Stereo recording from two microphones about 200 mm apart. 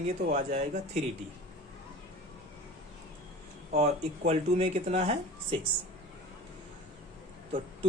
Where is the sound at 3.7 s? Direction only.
30° right (ahead or behind).